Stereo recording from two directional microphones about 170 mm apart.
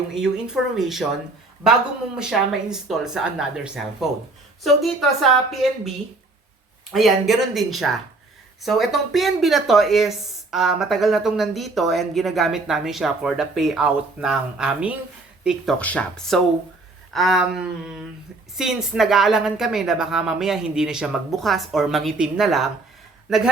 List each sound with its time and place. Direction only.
0.1 s speech: 5° right (ahead or behind)
6.9 s speech: centre (ahead or behind)
15.8 s speech: 10° left (ahead or behind)